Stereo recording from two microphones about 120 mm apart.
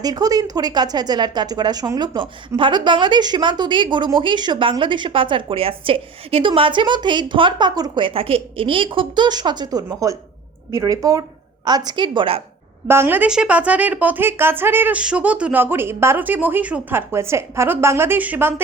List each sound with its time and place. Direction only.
0.0 s a woman's voice: 35° right (ahead or behind)
12.9 s speech: 20° right (ahead or behind)